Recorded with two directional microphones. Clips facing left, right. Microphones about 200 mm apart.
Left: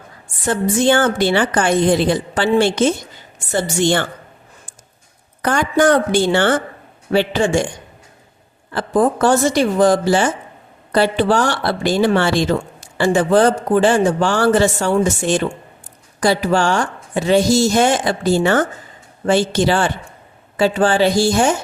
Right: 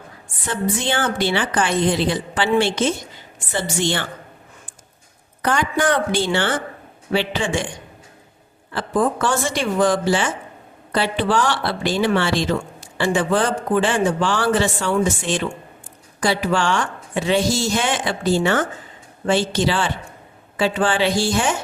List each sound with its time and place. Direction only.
0.4 s speech: 45° left (ahead or behind)
5.4 s speech: 45° left (ahead or behind)
8.7 s speech: 40° left (ahead or behind)